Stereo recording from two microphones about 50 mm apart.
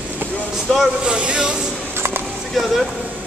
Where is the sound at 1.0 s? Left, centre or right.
Right.